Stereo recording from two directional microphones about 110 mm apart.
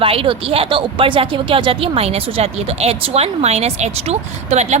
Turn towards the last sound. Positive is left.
turn(degrees=-90)